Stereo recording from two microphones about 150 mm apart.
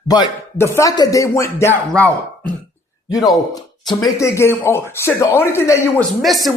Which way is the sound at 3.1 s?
25° left (ahead or behind).